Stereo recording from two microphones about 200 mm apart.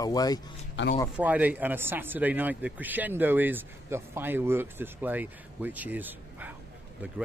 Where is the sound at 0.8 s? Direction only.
65° left (ahead or behind).